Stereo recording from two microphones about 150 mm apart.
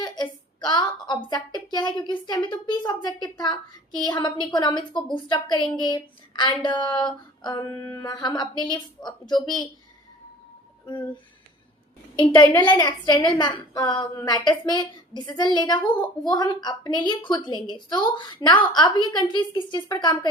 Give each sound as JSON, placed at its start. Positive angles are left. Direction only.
{"t": 0.0, "sound": "a woman's voice", "side_deg": 30}
{"t": 10.8, "sound": "speech", "side_deg": 30}
{"t": 12.3, "sound": "a woman's voice", "side_deg": 30}